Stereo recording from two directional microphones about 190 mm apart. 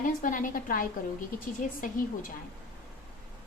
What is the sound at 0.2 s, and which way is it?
Speech, 45° left (ahead or behind).